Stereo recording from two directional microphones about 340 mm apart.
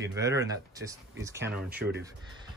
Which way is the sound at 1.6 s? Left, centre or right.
Right.